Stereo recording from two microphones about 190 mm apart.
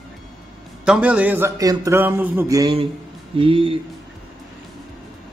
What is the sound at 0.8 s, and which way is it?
A man's voice, 5° right (ahead or behind).